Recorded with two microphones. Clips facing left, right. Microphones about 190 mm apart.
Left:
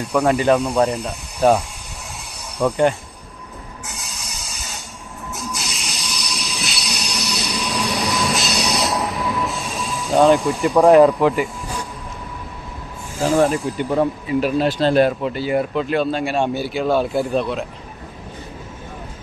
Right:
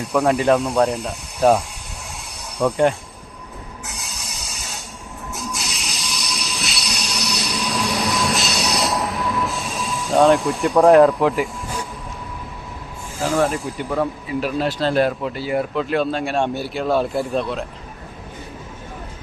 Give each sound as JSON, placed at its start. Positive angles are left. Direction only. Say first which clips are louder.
{"t": 0.0, "sound": "speech", "louder": "left 1 dB", "side_deg": 0}
{"t": 3.8, "sound": "rub", "louder": "even", "side_deg": 0}
{"t": 5.3, "sound": "train", "louder": "even", "side_deg": 0}
{"t": 13.9, "sound": "speech", "louder": "left 3 dB", "side_deg": 20}
{"t": 14.9, "sound": "speech", "louder": "left 3 dB", "side_deg": 0}